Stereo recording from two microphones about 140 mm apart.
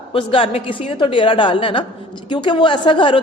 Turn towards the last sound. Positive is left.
turn(degrees=35)  # may be behind; listen again after turning